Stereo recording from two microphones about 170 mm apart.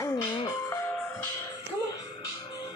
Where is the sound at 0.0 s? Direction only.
20° left (ahead or behind).